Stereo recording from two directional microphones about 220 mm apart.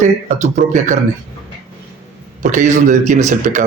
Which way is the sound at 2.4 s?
35° right (ahead or behind).